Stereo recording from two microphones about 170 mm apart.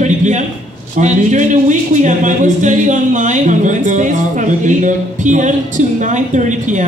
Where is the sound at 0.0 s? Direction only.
45° right (ahead or behind).